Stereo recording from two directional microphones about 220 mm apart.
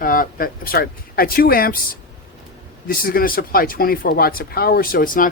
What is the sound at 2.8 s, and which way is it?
Speech, 40° left (ahead or behind).